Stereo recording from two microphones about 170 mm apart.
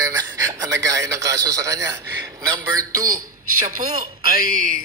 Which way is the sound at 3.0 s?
55° right (ahead or behind).